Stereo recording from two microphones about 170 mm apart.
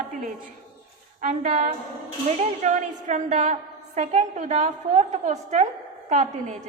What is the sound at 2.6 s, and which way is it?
A woman's voice, 45° right (ahead or behind).